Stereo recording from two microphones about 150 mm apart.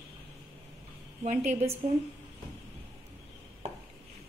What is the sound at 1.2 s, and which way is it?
Speech, 50° right (ahead or behind).